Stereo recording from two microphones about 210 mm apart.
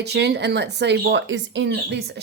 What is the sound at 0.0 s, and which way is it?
Speech, 50° right (ahead or behind).